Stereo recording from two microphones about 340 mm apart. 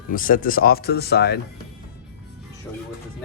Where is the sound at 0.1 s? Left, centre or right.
Left.